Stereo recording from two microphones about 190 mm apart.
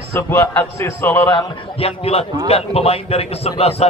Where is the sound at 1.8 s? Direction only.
30° left (ahead or behind).